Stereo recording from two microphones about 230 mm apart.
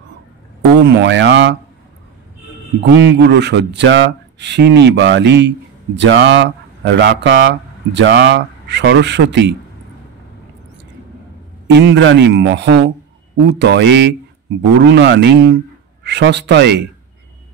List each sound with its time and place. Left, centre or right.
0.6 s speech: right
2.8 s speech: right
11.6 s speech: right